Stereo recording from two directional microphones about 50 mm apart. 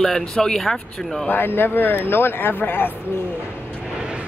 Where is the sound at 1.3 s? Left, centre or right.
Left.